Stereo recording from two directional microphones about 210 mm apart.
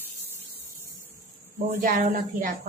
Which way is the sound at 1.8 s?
40° right (ahead or behind).